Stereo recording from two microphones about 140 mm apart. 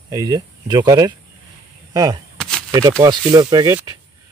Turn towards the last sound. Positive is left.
turn(degrees=-30)  # may be behind; listen again after turning